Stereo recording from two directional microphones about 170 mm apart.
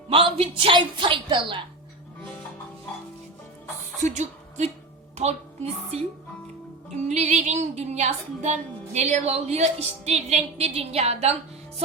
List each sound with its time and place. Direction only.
0.1 s a woman's voice: 30° right (ahead or behind)
4.0 s a woman's voice: 45° right (ahead or behind)